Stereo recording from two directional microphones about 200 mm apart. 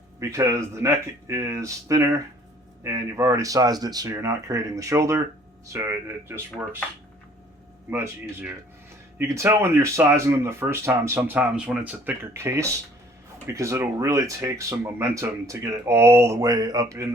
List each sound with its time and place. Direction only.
0.2 s speech: 15° right (ahead or behind)
7.9 s speech: 10° right (ahead or behind)